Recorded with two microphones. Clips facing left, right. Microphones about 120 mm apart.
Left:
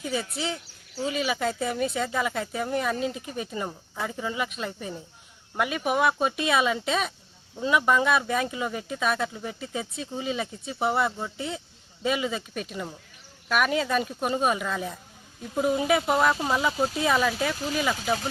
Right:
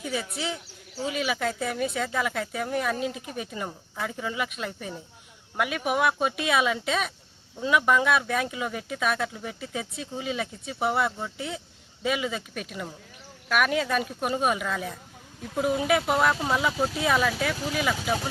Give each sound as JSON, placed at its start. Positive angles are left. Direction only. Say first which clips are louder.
{"t": 0.1, "sound": "speech", "louder": "left 1 dB", "side_deg": 0}